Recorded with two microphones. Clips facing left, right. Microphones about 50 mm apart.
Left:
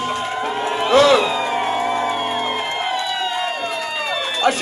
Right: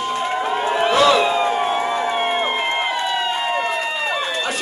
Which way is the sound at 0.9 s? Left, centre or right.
Left.